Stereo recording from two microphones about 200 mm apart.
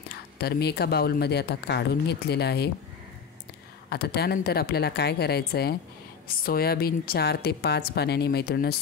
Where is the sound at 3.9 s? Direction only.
55° left (ahead or behind).